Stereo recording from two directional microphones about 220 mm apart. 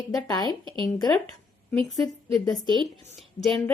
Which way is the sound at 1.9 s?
Centre (ahead or behind).